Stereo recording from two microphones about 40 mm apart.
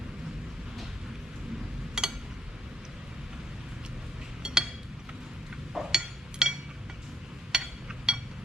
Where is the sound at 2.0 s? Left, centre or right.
Centre.